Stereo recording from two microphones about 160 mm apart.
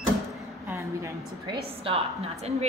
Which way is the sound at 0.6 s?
20° right (ahead or behind).